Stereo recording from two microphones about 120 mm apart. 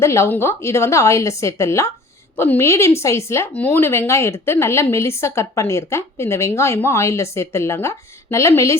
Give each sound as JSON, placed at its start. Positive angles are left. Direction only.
{"t": 0.0, "sound": "a woman's voice", "side_deg": 25}